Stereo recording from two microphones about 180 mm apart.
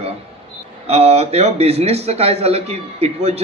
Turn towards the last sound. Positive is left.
turn(degrees=-35)  # may be behind; listen again after turning